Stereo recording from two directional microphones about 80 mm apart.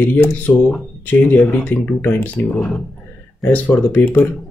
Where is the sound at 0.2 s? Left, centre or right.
Left.